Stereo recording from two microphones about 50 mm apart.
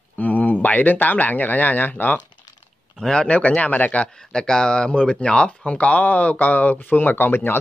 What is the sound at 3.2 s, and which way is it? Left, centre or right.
Speech, left.